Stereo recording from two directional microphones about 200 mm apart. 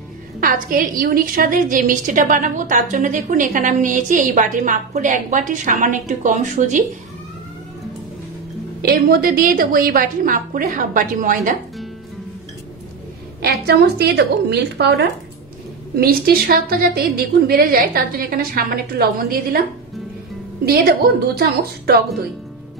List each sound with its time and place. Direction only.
0.4 s a woman's voice: 45° right (ahead or behind)
8.8 s a woman's voice: 50° right (ahead or behind)
13.4 s a woman's voice: 55° right (ahead or behind)
20.6 s a woman's voice: 50° right (ahead or behind)